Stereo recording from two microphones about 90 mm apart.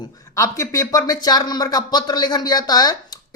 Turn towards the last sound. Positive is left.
turn(degrees=45)  # may be behind; listen again after turning